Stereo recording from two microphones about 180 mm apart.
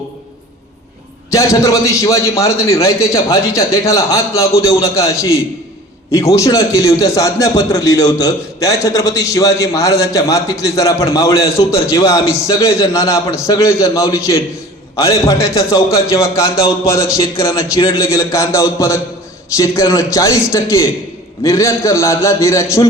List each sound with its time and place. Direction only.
1.3 s a man's voice: 20° left (ahead or behind)